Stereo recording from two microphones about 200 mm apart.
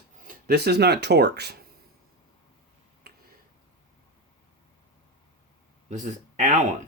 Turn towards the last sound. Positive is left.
turn(degrees=-35)  # may be behind; listen again after turning